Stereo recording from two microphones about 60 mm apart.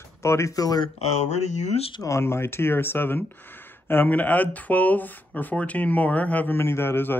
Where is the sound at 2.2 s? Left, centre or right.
Left.